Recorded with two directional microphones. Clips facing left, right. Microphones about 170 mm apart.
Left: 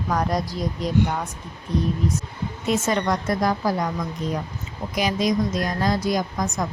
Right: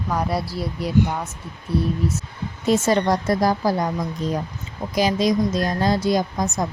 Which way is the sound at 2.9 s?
35° right (ahead or behind).